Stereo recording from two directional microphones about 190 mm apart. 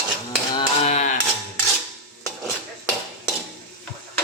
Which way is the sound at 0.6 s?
35° left (ahead or behind).